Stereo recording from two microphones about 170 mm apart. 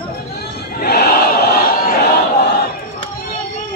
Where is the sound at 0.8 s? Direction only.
70° left (ahead or behind).